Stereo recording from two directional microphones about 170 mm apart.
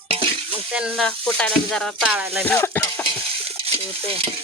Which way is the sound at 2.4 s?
10° left (ahead or behind).